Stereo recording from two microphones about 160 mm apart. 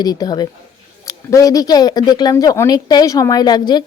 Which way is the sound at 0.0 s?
25° left (ahead or behind).